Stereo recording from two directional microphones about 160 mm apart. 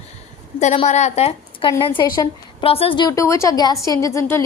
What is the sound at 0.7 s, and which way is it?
A woman's voice, 45° left (ahead or behind).